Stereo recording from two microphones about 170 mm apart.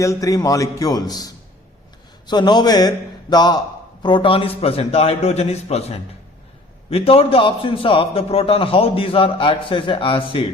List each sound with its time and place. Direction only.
0.0 s a man's voice: 20° left (ahead or behind)